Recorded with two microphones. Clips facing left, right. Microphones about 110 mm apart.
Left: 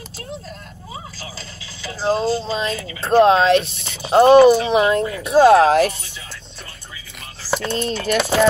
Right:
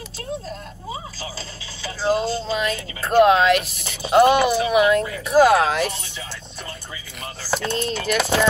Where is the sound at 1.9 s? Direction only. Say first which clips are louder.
Left 2 dB; 35° left (ahead or behind).